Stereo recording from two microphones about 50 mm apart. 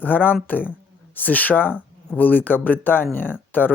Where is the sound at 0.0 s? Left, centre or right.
Left.